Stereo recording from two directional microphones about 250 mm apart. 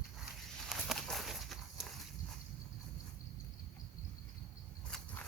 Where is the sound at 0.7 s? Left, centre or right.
Centre.